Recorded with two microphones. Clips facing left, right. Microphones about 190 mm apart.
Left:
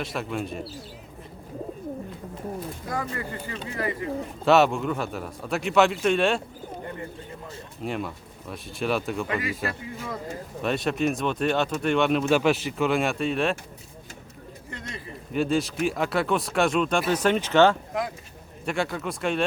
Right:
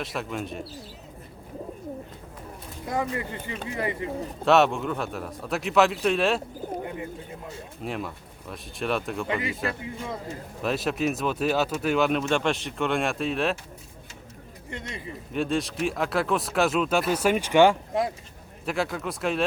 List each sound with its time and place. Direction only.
0.0 s speech: centre (ahead or behind)
2.9 s a man's voice: 20° right (ahead or behind)
4.4 s speech: centre (ahead or behind)
7.8 s speech: centre (ahead or behind)
9.2 s a man's voice: 25° right (ahead or behind)
10.6 s speech: centre (ahead or behind)
14.7 s speech: 25° right (ahead or behind)
15.3 s speech: centre (ahead or behind)
18.6 s speech: centre (ahead or behind)